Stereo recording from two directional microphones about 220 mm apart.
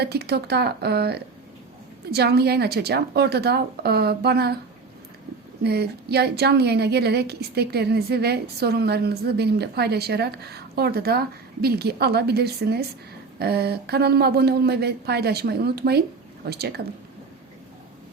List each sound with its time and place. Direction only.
0.0 s a woman's voice: 45° right (ahead or behind)
5.6 s a woman's voice: 45° right (ahead or behind)